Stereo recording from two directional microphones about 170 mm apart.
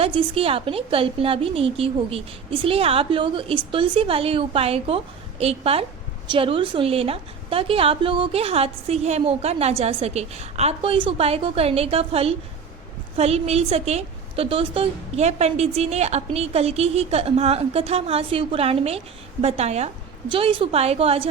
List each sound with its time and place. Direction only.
0.0 s a woman's voice: 30° right (ahead or behind)